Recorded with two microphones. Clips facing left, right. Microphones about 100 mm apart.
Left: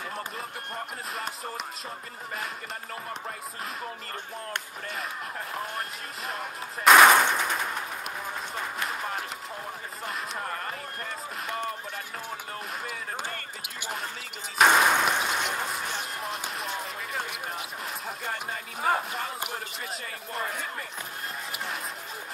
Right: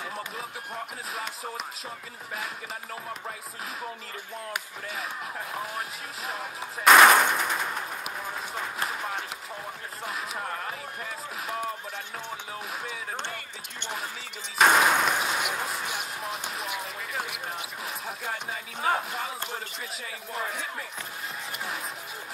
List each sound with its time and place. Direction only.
0.1 s basketball bounce: centre (ahead or behind)
3.8 s speech: 5° right (ahead or behind)
8.8 s a sound: centre (ahead or behind)
10.0 s music: centre (ahead or behind)
12.8 s basketball bounce: 5° left (ahead or behind)
14.6 s a sound: centre (ahead or behind)
20.3 s speech: centre (ahead or behind)